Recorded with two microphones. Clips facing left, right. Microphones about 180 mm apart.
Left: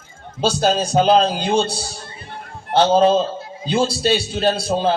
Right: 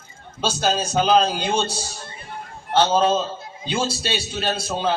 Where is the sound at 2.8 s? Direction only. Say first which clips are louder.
Left 4 dB; 35° left (ahead or behind).